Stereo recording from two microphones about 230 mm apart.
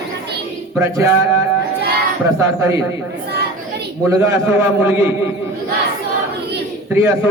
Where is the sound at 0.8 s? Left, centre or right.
Centre.